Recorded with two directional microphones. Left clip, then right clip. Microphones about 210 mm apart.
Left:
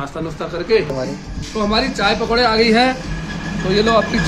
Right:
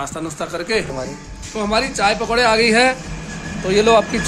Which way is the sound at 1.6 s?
50° right (ahead or behind).